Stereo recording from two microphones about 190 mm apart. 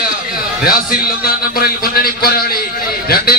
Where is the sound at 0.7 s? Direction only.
50° left (ahead or behind).